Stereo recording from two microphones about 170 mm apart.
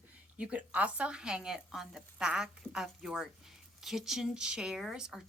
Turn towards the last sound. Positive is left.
turn(degrees=-5)  # may be behind; listen again after turning